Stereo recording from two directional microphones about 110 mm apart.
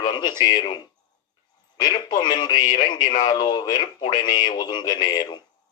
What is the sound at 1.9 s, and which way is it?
A man's voice, 40° left (ahead or behind).